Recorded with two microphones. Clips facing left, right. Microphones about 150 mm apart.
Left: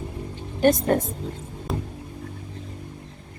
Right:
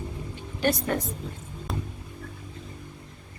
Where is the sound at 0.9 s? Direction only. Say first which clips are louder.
Left 7 dB; 45° left (ahead or behind).